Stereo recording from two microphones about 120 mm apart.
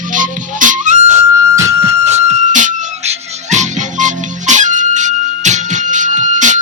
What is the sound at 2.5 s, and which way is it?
Music, 90° right.